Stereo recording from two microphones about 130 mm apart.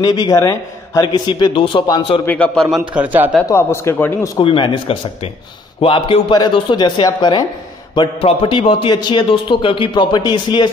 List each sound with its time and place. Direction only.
0.0 s a man's voice: 30° left (ahead or behind)
2.2 s a man's voice: 10° left (ahead or behind)
2.9 s a man's voice: 10° right (ahead or behind)
3.4 s a man's voice: 20° left (ahead or behind)
4.4 s a man's voice: 40° left (ahead or behind)